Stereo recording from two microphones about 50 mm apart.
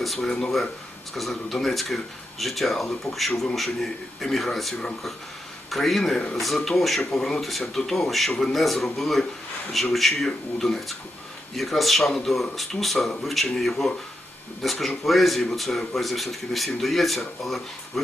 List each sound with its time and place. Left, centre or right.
0.0 s speech: centre
5.7 s speech: centre
7.0 s speech: centre